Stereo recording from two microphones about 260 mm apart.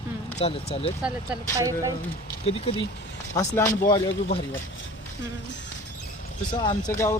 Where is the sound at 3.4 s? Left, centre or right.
Centre.